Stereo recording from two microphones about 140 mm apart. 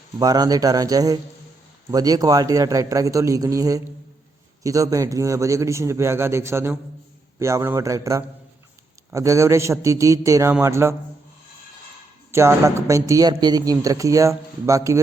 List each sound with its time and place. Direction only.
0.2 s a man's voice: 25° right (ahead or behind)
12.3 s a man's voice: 20° right (ahead or behind)